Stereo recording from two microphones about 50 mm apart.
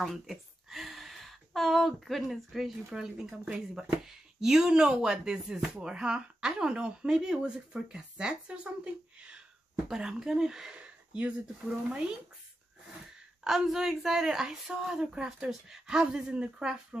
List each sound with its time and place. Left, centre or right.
0.0 s a woman's voice: centre; by 11.3 s right
13.4 s speech: centre